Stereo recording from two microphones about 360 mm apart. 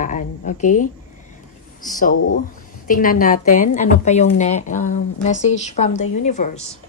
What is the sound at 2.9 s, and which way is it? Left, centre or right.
A woman's voice, left.